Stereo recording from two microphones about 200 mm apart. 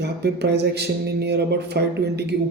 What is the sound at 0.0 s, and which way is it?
Speech, 55° right (ahead or behind).